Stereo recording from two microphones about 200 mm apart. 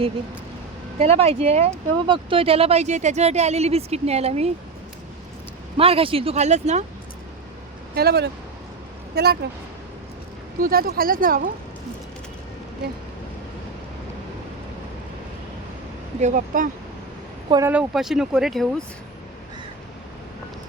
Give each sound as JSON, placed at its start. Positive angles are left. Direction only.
{"t": 0.9, "sound": "speech", "side_deg": -30}
{"t": 5.7, "sound": "speech", "side_deg": -30}
{"t": 7.9, "sound": "speech", "side_deg": -55}
{"t": 10.6, "sound": "speech", "side_deg": -50}
{"t": 16.2, "sound": "speech", "side_deg": -40}
{"t": 17.5, "sound": "speech", "side_deg": -10}